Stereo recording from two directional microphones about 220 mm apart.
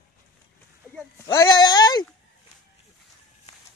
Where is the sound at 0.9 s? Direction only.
15° left (ahead or behind).